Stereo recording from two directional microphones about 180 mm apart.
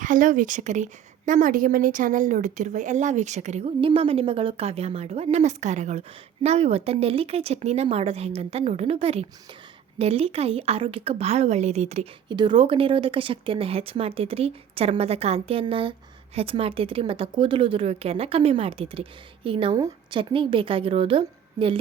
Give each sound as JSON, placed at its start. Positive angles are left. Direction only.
{"t": 0.0, "sound": "a woman's voice", "side_deg": -45}